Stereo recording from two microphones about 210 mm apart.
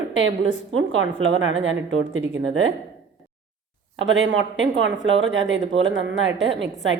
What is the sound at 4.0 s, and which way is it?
Speech, 65° right (ahead or behind).